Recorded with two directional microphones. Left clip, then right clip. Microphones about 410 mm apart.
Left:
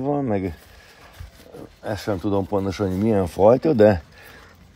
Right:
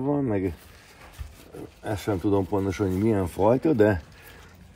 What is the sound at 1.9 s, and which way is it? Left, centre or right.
Speech, centre.